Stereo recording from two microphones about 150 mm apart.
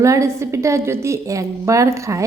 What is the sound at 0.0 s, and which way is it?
A woman's voice, 20° right (ahead or behind).